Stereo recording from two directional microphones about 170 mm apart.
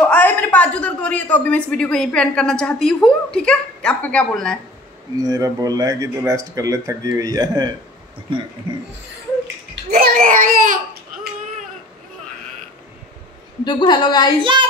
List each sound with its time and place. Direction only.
0.1 s a woman's voice: 10° left (ahead or behind)
5.1 s speech: 20° right (ahead or behind)
9.9 s a child's voice: 55° right (ahead or behind)
13.7 s a woman's voice: 25° left (ahead or behind)
14.4 s speech: 30° right (ahead or behind)